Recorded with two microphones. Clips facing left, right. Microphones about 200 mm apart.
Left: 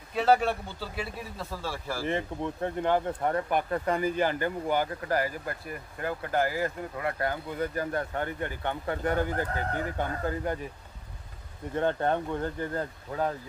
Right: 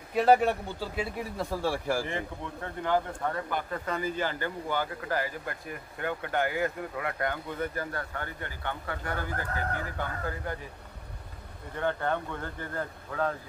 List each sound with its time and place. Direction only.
0.1 s a man's voice: 15° right (ahead or behind)
2.0 s speech: 20° left (ahead or behind)
5.0 s speech: 40° left (ahead or behind)
7.7 s speech: 20° left (ahead or behind)
11.7 s speech: 20° left (ahead or behind)